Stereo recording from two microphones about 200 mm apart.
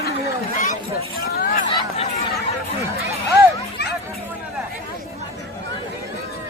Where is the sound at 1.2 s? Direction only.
50° left (ahead or behind).